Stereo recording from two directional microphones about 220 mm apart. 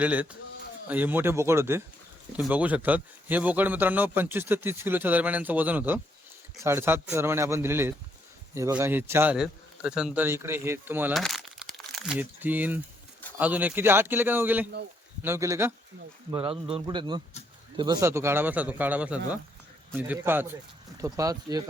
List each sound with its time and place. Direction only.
0.0 s speech: 5° right (ahead or behind)
11.2 s crumpling: centre (ahead or behind)
13.3 s speech: 5° right (ahead or behind)
16.3 s a man's voice: 25° right (ahead or behind)